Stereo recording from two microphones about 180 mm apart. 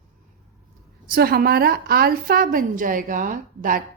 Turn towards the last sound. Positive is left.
turn(degrees=-50)  # may be behind; listen again after turning